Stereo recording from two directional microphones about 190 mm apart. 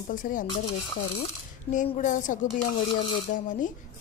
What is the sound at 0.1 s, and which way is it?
Speech, 45° left (ahead or behind).